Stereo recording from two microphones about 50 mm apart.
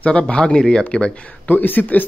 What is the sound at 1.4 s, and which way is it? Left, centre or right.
Speech, left.